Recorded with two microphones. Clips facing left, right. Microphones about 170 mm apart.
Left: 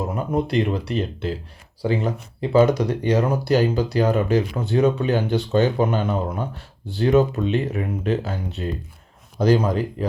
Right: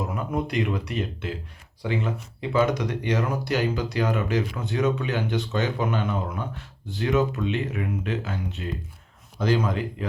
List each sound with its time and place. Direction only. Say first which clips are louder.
0.1 s speech: left 5 dB; 30° left (ahead or behind)